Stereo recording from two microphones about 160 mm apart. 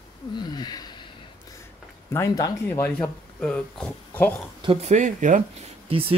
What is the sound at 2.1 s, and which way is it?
Speech, 20° left (ahead or behind).